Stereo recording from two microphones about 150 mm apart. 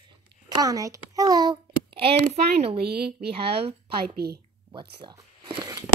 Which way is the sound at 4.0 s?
90° right.